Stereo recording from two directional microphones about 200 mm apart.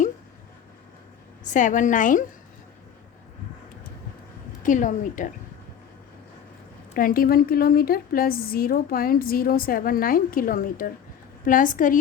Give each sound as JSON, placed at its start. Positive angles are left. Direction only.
{"t": 1.5, "sound": "a woman's voice", "side_deg": 40}
{"t": 4.6, "sound": "a woman's voice", "side_deg": 40}
{"t": 6.9, "sound": "a woman's voice", "side_deg": 45}